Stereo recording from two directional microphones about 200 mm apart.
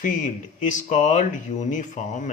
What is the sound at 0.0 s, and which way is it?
Speech, 40° left (ahead or behind).